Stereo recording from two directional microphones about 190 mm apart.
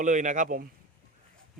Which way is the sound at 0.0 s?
40° right (ahead or behind).